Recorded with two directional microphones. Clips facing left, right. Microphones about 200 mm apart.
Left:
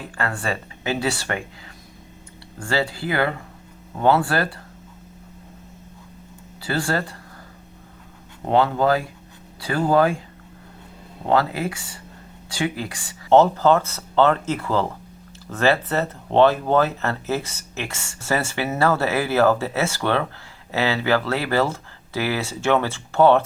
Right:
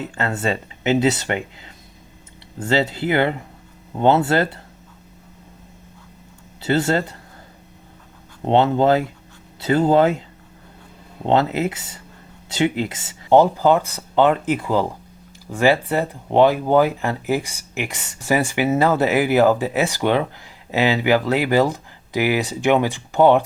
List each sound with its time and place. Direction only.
0.0 s speech: 20° right (ahead or behind)
2.6 s speech: 20° right (ahead or behind)
6.6 s speech: 20° right (ahead or behind)
8.4 s speech: 25° right (ahead or behind)
11.3 s speech: 20° right (ahead or behind)